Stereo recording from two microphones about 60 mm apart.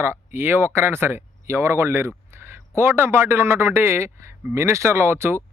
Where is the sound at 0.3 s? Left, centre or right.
Right.